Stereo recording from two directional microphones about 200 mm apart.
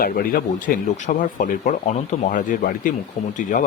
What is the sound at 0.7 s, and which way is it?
Speech, 40° left (ahead or behind).